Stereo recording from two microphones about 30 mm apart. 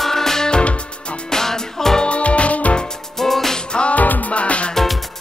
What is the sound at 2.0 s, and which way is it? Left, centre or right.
Music, left.